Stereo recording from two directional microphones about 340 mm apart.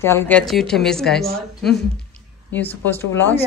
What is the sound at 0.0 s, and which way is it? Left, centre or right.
A woman's voice, centre.